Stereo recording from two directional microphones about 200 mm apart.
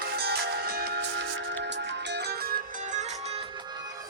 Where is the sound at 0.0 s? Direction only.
50° right (ahead or behind); by 4.1 s 20° right (ahead or behind).